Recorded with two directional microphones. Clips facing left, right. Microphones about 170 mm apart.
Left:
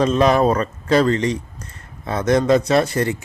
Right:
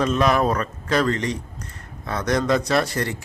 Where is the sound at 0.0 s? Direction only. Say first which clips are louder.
Left 4 dB; 30° left (ahead or behind).